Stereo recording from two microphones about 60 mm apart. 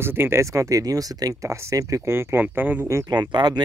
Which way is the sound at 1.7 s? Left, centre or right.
Right.